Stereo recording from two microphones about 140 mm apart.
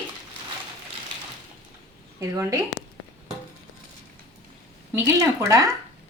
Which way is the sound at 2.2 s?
25° right (ahead or behind).